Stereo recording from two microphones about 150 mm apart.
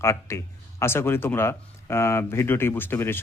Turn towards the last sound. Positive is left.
turn(degrees=15)  # may be behind; listen again after turning